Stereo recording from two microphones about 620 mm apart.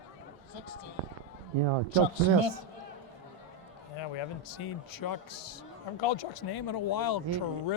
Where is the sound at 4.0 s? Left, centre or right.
Left.